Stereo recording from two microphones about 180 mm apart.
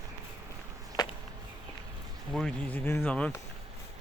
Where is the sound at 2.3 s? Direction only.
5° left (ahead or behind).